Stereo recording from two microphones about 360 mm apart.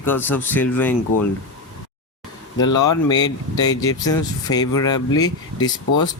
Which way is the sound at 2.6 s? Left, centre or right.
Centre.